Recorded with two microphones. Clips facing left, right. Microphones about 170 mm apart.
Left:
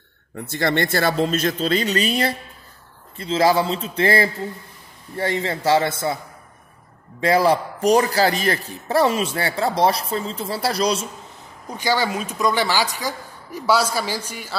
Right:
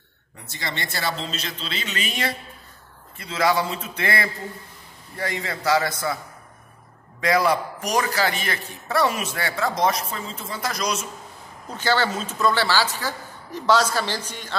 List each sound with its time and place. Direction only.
0.5 s a man's voice: 55° left (ahead or behind); by 6.1 s 25° left (ahead or behind)
7.2 s a man's voice: 30° left (ahead or behind)
11.7 s a woman's voice: 10° left (ahead or behind)